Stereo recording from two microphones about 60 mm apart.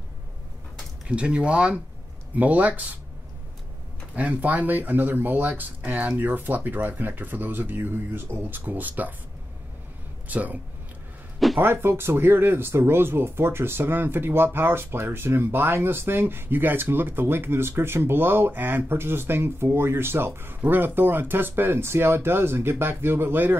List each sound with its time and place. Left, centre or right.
1.0 s speech: centre
4.1 s speech: right
10.2 s speech: right
11.3 s a sound: centre
11.6 s speech: right